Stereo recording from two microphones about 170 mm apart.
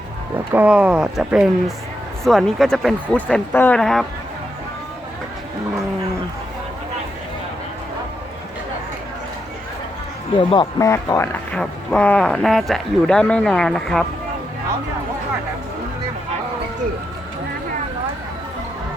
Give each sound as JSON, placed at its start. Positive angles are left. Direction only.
{"t": 0.5, "sound": "speech", "side_deg": -5}
{"t": 10.3, "sound": "speech", "side_deg": 30}
{"t": 11.5, "sound": "speech", "side_deg": 5}